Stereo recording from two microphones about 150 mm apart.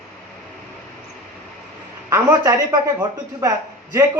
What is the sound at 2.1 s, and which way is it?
Speech, 20° right (ahead or behind).